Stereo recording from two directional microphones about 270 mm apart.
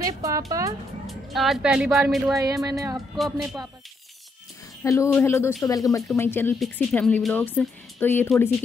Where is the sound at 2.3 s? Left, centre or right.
Centre.